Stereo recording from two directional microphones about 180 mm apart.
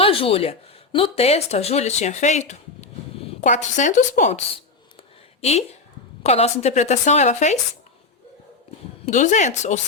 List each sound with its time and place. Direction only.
0.0 s a woman's voice: 30° left (ahead or behind)
9.0 s a woman's voice: 45° left (ahead or behind)